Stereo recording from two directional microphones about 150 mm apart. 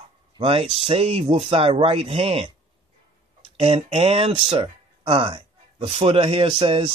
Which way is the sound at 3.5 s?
40° right (ahead or behind).